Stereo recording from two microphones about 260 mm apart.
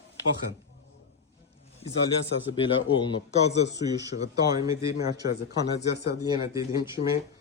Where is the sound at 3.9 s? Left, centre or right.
Centre.